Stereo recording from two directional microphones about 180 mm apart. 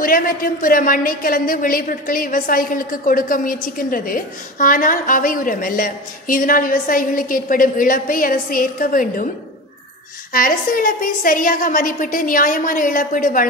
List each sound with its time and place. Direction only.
0.0 s a woman's voice: 50° left (ahead or behind)
10.3 s a woman's voice: 50° left (ahead or behind)